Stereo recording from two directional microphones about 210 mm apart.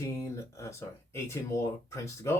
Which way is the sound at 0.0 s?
15° left (ahead or behind).